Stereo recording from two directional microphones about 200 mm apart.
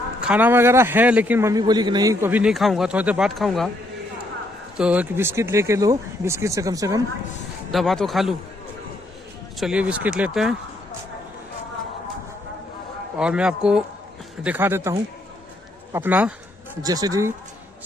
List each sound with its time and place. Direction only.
0.2 s a man's voice: 5° right (ahead or behind)
4.8 s a man's voice: 5° right (ahead or behind)
7.7 s speech: centre (ahead or behind)
9.6 s speech: 5° right (ahead or behind)
13.1 s a man's voice: 5° right (ahead or behind)